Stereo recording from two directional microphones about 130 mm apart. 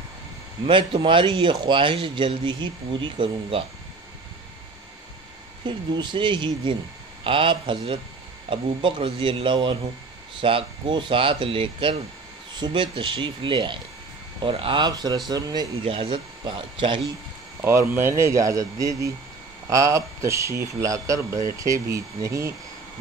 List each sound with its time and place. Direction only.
0.7 s speech: 40° right (ahead or behind)
5.7 s speech: 35° right (ahead or behind)
15.8 s speech: 45° right (ahead or behind)
17.6 s speech: 20° right (ahead or behind)